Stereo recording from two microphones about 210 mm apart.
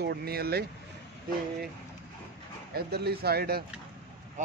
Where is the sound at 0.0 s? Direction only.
50° right (ahead or behind).